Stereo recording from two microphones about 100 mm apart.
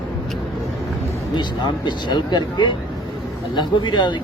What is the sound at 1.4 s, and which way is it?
Speech, 50° left (ahead or behind).